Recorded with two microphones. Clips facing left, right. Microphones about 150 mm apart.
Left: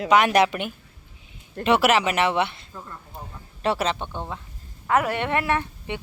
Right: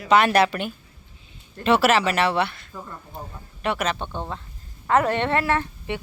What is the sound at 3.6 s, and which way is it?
Speech, 30° left (ahead or behind).